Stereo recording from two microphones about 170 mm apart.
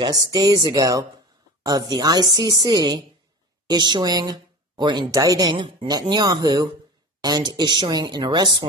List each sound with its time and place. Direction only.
0.0 s speech: 25° right (ahead or behind)